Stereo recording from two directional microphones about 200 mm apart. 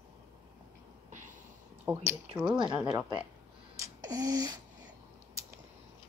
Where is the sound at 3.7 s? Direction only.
15° right (ahead or behind).